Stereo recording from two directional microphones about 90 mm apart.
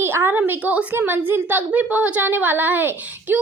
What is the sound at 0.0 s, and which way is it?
A woman's voice, 25° right (ahead or behind).